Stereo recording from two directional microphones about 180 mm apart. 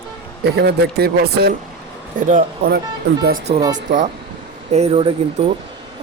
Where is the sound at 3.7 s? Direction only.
45° right (ahead or behind).